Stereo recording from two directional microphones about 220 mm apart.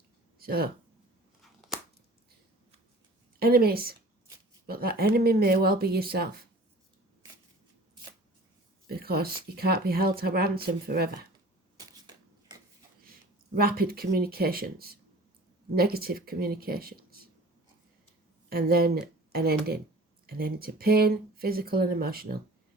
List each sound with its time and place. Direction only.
0.3 s speech: 45° right (ahead or behind)
1.4 s scissors: centre (ahead or behind)
3.3 s a woman's voice: 45° right (ahead or behind)
8.9 s speech: 45° right (ahead or behind)
11.8 s shuffling cards: 20° right (ahead or behind)
13.1 s speech: 40° right (ahead or behind)
18.4 s speech: 45° right (ahead or behind)